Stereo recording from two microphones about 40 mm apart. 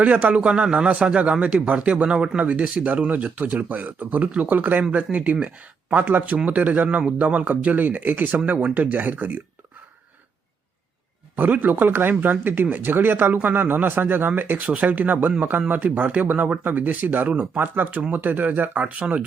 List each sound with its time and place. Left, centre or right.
0.0 s speech: right
4.8 s speech: right
6.3 s speech: right
8.4 s speech: right
11.3 s speech: right
14.7 s speech: right